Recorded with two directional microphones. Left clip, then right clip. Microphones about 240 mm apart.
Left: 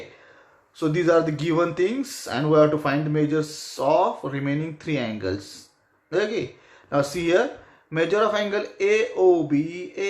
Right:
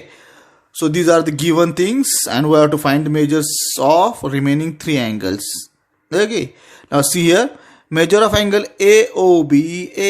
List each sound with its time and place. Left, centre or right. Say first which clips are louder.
0.8 s speech: right 7 dB; right